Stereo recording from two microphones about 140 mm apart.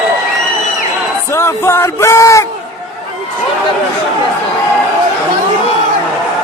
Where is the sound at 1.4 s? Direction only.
20° left (ahead or behind).